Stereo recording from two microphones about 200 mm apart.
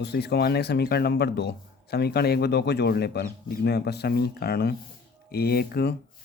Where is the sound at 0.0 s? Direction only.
55° left (ahead or behind).